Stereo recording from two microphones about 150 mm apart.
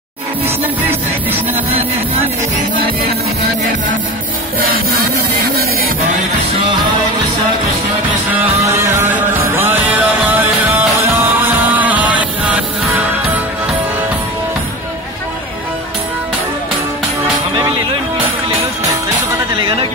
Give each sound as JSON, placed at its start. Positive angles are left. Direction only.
{"t": 0.8, "sound": "music", "side_deg": -15}
{"t": 4.6, "sound": "music", "side_deg": -90}
{"t": 8.3, "sound": "music", "side_deg": -20}